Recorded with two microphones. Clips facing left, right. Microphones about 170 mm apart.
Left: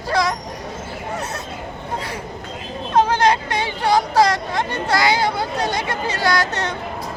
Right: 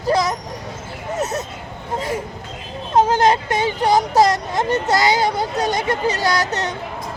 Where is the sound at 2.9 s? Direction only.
20° right (ahead or behind).